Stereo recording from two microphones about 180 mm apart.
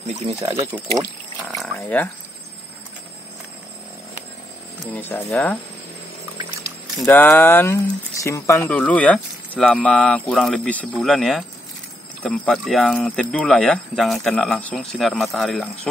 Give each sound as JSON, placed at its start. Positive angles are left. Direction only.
{"t": 0.4, "sound": "speech", "side_deg": -20}
{"t": 1.5, "sound": "a sound", "side_deg": 5}
{"t": 4.9, "sound": "speech", "side_deg": 10}
{"t": 7.1, "sound": "speech", "side_deg": 10}